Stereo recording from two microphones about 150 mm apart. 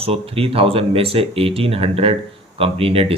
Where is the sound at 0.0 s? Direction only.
40° right (ahead or behind).